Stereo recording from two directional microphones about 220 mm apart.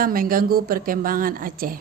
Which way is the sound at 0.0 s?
40° right (ahead or behind).